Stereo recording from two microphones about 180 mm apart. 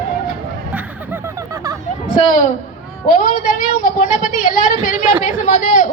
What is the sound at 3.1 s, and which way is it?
A woman's voice, 50° left (ahead or behind).